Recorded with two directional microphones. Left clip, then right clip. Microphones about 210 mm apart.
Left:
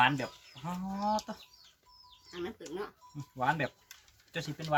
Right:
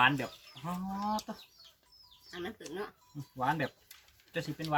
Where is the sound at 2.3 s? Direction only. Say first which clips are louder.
Left 1 dB; centre (ahead or behind).